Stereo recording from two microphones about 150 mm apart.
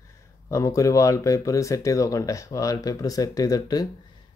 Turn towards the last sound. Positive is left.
turn(degrees=25)  # may be behind; listen again after turning